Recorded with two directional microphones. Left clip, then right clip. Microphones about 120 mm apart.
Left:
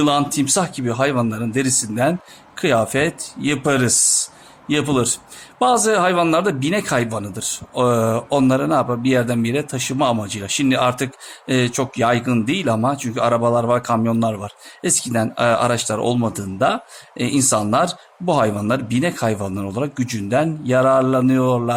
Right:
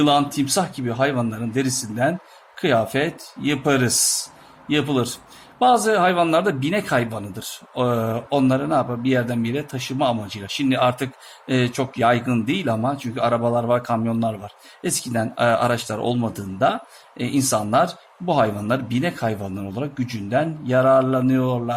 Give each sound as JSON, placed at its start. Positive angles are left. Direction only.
{"t": 0.0, "sound": "speech", "side_deg": 30}